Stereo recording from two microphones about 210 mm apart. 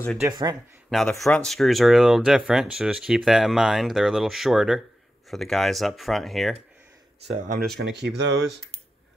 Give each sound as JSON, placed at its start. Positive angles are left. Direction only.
{"t": 0.2, "sound": "speech", "side_deg": -15}
{"t": 0.8, "sound": "speech", "side_deg": 0}
{"t": 7.2, "sound": "speech", "side_deg": -35}
{"t": 7.7, "sound": "speech", "side_deg": -50}